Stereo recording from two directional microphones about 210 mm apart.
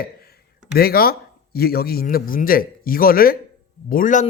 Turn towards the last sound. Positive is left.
turn(degrees=40)  # may be behind; listen again after turning